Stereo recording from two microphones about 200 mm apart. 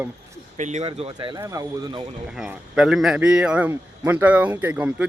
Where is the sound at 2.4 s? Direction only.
5° right (ahead or behind).